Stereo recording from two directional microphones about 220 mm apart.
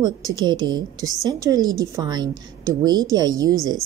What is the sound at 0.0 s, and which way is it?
A woman's voice, 20° right (ahead or behind).